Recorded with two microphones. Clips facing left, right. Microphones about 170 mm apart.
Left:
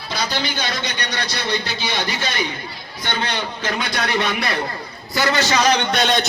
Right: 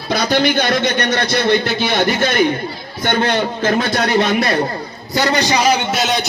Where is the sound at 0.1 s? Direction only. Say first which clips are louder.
Right 9 dB; 55° right (ahead or behind).